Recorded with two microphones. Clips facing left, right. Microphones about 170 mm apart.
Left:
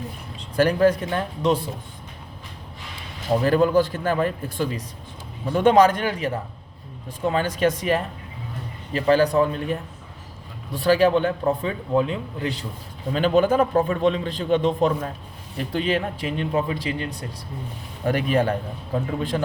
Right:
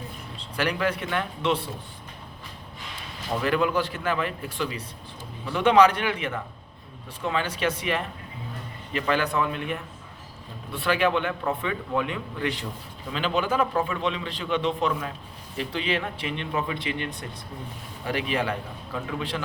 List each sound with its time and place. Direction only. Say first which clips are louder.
0.5 s a man's voice: left 8 dB; 45° left (ahead or behind)
3.3 s speech: left 6 dB; 35° left (ahead or behind)
13.1 s a man's voice: left 8 dB; 45° left (ahead or behind)